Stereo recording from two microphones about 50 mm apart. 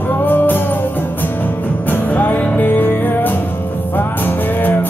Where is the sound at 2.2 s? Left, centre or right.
Left.